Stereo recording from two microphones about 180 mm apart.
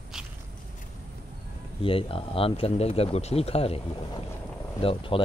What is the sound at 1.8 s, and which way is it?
Speech, 30° left (ahead or behind).